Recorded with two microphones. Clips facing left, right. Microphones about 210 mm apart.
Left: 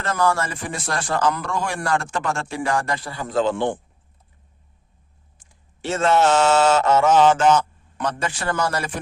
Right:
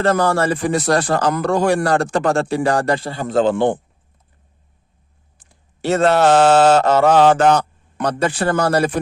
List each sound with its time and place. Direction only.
0.0 s speech: 35° right (ahead or behind)
3.5 s a man's voice: 60° right (ahead or behind)
5.4 s a sound: 35° right (ahead or behind)
6.1 s a man's voice: 60° right (ahead or behind)
6.6 s speech: 30° right (ahead or behind)